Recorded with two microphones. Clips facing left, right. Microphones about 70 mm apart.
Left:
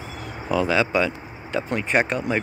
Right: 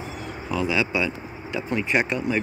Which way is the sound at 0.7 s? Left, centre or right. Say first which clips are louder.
Left 2 dB; left.